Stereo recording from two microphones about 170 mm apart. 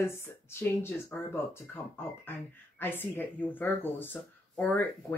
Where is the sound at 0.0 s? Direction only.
15° left (ahead or behind).